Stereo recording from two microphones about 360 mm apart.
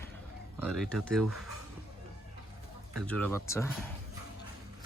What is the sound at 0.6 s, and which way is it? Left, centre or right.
Speech, centre.